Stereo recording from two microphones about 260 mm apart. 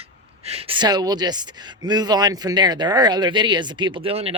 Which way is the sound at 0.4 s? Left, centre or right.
Right.